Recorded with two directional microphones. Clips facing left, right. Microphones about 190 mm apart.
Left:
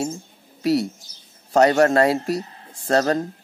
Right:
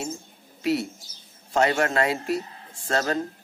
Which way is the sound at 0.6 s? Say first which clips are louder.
Left 5 dB; 40° left (ahead or behind).